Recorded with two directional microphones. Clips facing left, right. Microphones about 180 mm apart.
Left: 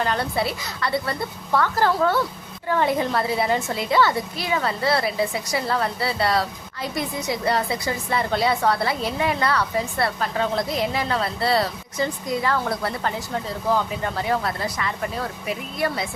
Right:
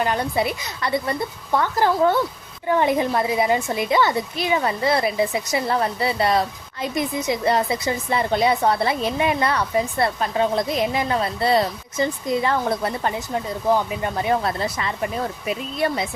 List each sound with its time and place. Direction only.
0.0 s a woman's voice: 15° right (ahead or behind)